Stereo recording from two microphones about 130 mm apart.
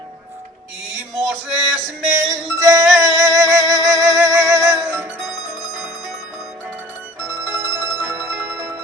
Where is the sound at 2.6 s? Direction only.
25° right (ahead or behind).